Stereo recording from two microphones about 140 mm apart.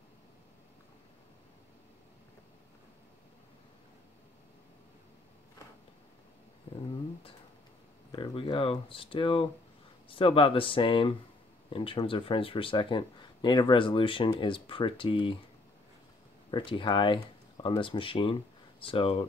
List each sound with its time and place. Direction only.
8.1 s speech: 35° left (ahead or behind)
16.4 s speech: 35° left (ahead or behind)